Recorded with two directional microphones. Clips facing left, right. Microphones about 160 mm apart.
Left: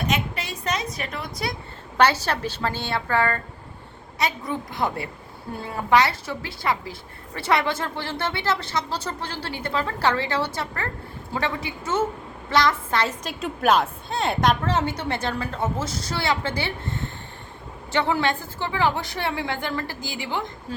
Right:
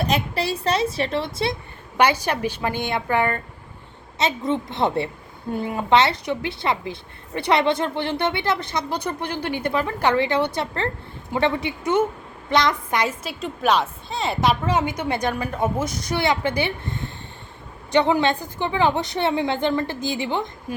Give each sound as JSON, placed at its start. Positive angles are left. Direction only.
{"t": 0.0, "sound": "a woman's voice", "side_deg": -35}
{"t": 2.0, "sound": "a woman's voice", "side_deg": -15}
{"t": 13.4, "sound": "speech", "side_deg": 0}
{"t": 14.6, "sound": "a woman's voice", "side_deg": -10}